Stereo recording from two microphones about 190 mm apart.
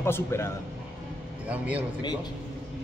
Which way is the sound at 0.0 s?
10° left (ahead or behind).